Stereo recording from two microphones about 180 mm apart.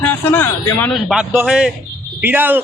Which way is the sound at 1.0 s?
Centre (ahead or behind).